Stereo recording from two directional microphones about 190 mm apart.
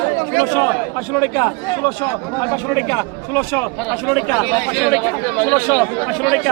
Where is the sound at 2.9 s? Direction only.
15° left (ahead or behind).